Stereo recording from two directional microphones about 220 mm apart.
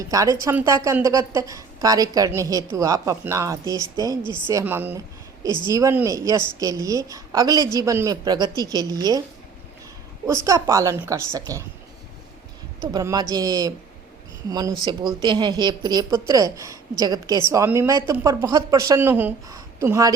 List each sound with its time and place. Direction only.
0.0 s speech: 15° right (ahead or behind)
10.2 s speech: 15° right (ahead or behind)
12.9 s speech: 15° right (ahead or behind)
14.8 s speech: 20° right (ahead or behind)